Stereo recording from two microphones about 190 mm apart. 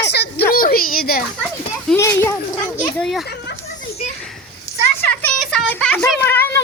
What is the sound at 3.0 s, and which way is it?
Speech, centre (ahead or behind).